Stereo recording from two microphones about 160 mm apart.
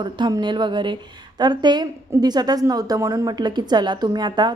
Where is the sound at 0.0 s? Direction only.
25° right (ahead or behind).